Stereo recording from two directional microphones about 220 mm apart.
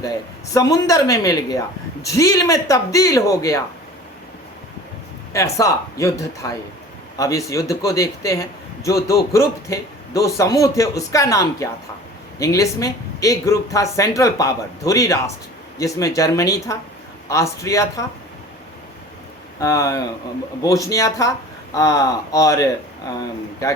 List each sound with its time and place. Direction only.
0.0 s speech: 15° left (ahead or behind)
5.3 s speech: 15° left (ahead or behind)
19.5 s speech: 15° left (ahead or behind)